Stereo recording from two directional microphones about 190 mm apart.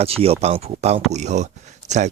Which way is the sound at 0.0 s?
30° right (ahead or behind).